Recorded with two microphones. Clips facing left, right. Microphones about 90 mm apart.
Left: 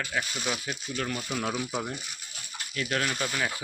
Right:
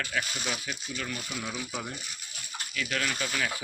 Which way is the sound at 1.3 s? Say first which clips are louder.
Left 8 dB; 55° left (ahead or behind).